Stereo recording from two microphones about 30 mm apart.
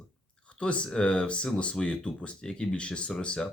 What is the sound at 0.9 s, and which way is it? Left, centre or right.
Speech, left.